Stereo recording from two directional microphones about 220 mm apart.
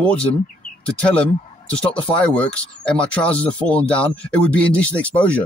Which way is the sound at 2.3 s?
5° left (ahead or behind).